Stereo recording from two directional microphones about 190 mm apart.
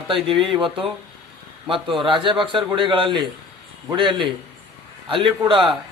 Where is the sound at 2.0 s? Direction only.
25° right (ahead or behind).